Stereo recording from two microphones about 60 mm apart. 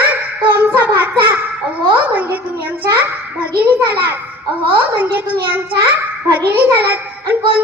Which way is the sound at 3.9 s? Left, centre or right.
Right.